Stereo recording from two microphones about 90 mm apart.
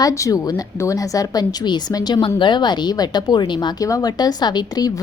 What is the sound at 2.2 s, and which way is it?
A woman's voice, 60° left (ahead or behind).